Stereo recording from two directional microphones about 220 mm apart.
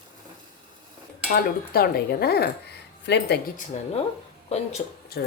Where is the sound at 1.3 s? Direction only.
45° left (ahead or behind).